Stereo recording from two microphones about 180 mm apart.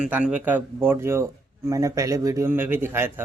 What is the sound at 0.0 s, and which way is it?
Speech, 5° right (ahead or behind).